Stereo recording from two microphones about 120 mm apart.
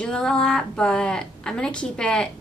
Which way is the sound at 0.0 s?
5° left (ahead or behind).